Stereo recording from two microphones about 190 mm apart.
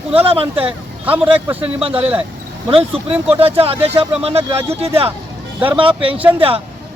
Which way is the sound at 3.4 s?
30° right (ahead or behind).